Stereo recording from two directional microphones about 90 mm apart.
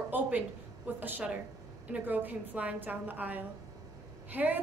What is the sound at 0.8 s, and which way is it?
A woman's voice, 20° right (ahead or behind).